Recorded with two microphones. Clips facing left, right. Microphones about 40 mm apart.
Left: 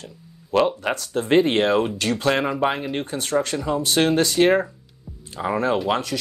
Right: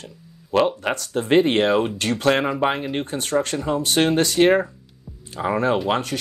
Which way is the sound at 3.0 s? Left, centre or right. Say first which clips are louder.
Even; right.